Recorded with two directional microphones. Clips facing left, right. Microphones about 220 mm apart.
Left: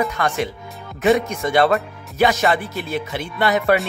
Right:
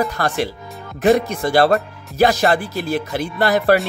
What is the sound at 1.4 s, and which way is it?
Music, 35° right (ahead or behind).